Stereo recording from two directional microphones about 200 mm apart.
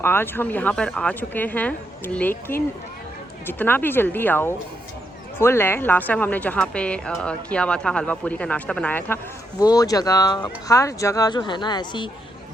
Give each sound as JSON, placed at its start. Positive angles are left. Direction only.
{"t": 0.0, "sound": "a woman's voice", "side_deg": 10}
{"t": 3.4, "sound": "a woman's voice", "side_deg": 10}